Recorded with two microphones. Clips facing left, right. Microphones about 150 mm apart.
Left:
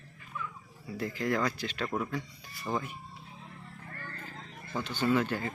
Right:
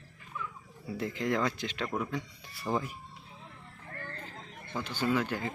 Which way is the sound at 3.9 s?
45° right (ahead or behind).